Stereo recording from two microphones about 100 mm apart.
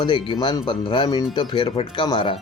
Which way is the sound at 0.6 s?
50° left (ahead or behind).